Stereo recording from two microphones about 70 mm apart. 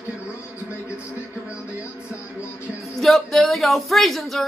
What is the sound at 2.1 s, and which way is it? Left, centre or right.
Music, left.